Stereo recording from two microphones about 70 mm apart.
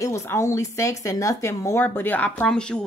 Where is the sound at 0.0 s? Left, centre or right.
Left.